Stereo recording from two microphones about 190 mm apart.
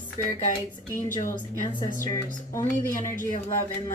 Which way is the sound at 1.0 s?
45° left (ahead or behind).